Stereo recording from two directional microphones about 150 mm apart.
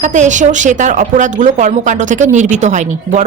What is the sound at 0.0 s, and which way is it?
A woman's voice, 55° right (ahead or behind).